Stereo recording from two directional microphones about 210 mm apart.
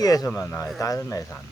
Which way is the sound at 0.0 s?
15° left (ahead or behind).